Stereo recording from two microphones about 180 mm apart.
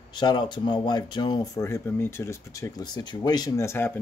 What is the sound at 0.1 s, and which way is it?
Speech, 25° left (ahead or behind).